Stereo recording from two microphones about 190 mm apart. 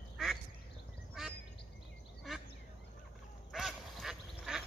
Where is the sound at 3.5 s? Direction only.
Centre (ahead or behind).